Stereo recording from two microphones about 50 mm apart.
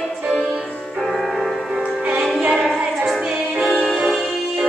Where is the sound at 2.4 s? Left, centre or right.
Centre.